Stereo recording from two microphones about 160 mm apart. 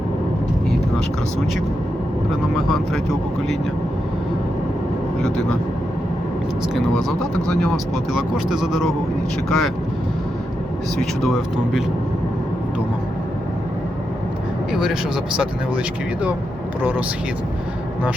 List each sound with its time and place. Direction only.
2.6 s speech: centre (ahead or behind)
7.2 s speech: 5° left (ahead or behind)
11.2 s speech: centre (ahead or behind)
14.7 s speech: 5° right (ahead or behind)